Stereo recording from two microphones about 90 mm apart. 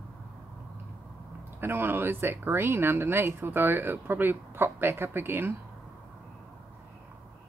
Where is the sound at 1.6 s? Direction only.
25° right (ahead or behind).